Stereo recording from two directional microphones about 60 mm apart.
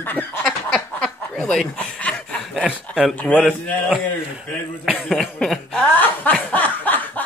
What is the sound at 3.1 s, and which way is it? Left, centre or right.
Speech, left.